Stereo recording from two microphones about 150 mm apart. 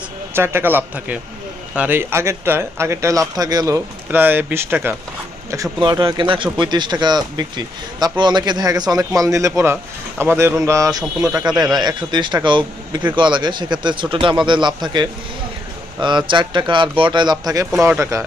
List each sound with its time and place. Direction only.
0.3 s speech: 15° right (ahead or behind)
4.1 s speech: 15° right (ahead or behind)
5.8 s a man's voice: 30° right (ahead or behind)